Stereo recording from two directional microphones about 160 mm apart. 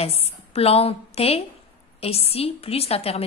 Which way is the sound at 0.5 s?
40° left (ahead or behind).